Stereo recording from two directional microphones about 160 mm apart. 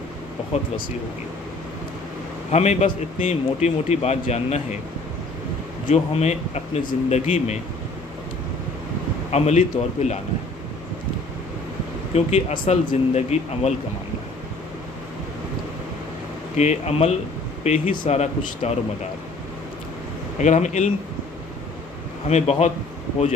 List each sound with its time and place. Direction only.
2.5 s a man's voice: 45° left (ahead or behind)
5.9 s a man's voice: 40° left (ahead or behind)
9.3 s a man's voice: 45° left (ahead or behind)
12.1 s a man's voice: 45° left (ahead or behind)
16.6 s a man's voice: 45° left (ahead or behind)
17.9 s speech: 30° left (ahead or behind)
18.6 s a man's voice: 40° left (ahead or behind)
20.4 s a man's voice: 50° left (ahead or behind)
22.3 s a man's voice: 40° left (ahead or behind)